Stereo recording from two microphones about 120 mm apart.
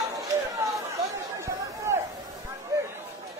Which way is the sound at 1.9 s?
25° right (ahead or behind).